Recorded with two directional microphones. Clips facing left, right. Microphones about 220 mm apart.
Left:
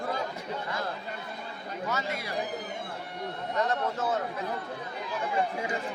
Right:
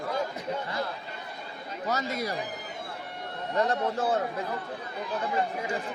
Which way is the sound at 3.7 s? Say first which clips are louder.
Right 2 dB; 30° right (ahead or behind).